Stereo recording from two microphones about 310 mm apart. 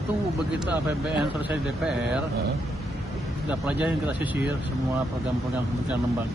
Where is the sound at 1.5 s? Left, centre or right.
Centre.